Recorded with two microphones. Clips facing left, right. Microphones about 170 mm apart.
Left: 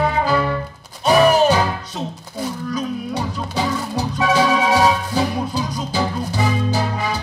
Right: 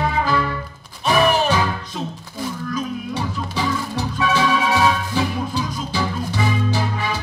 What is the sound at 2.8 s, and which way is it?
Music, 35° left (ahead or behind).